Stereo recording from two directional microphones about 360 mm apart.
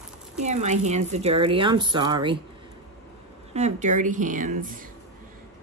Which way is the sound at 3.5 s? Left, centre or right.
Centre.